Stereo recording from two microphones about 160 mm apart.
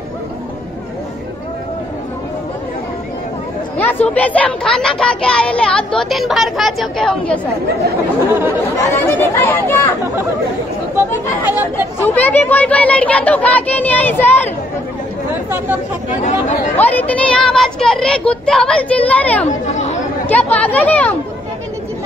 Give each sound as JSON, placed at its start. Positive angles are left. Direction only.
{"t": 3.7, "sound": "speech", "side_deg": 10}
{"t": 8.3, "sound": "speech", "side_deg": -10}
{"t": 8.9, "sound": "speech", "side_deg": 15}
{"t": 12.1, "sound": "speech", "side_deg": 10}
{"t": 16.2, "sound": "speech", "side_deg": 50}
{"t": 16.7, "sound": "speech", "side_deg": 10}
{"t": 19.4, "sound": "chatter", "side_deg": 45}
{"t": 20.2, "sound": "speech", "side_deg": 10}